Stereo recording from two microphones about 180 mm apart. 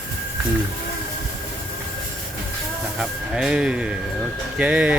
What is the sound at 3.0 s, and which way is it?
Speech, 5° right (ahead or behind).